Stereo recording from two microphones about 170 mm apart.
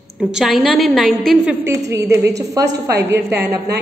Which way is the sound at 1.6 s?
20° right (ahead or behind).